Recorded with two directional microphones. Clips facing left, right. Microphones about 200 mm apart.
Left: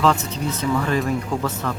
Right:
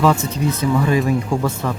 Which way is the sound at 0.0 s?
10° right (ahead or behind).